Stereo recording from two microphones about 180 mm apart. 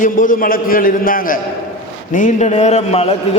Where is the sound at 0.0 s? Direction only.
50° left (ahead or behind).